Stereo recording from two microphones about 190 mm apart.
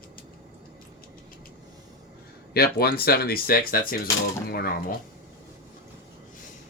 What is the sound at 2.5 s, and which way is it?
Speech, 55° left (ahead or behind).